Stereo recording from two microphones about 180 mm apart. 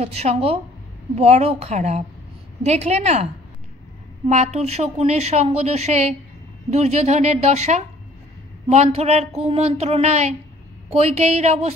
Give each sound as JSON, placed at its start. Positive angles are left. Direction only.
{"t": 0.0, "sound": "a woman's voice", "side_deg": -35}
{"t": 4.3, "sound": "a woman's voice", "side_deg": -40}